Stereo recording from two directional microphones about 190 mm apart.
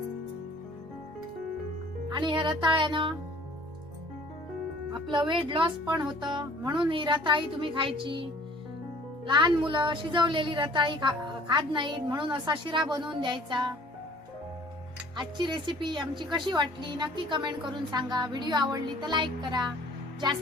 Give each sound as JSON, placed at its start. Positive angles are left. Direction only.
{"t": 2.0, "sound": "speech", "side_deg": -25}
{"t": 5.1, "sound": "speech", "side_deg": -25}
{"t": 15.1, "sound": "speech", "side_deg": -25}